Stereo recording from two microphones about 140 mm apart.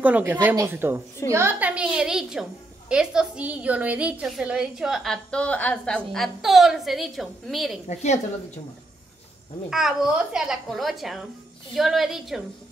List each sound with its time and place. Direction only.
0.0 s a woman's voice: 10° right (ahead or behind)
7.9 s a woman's voice: 55° left (ahead or behind)
9.7 s a woman's voice: 5° right (ahead or behind)